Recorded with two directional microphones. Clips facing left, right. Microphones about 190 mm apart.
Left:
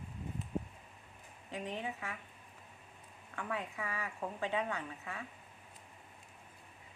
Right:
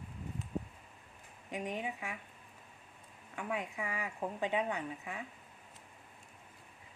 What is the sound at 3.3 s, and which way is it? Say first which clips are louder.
Speech: right 2 dB; 15° right (ahead or behind).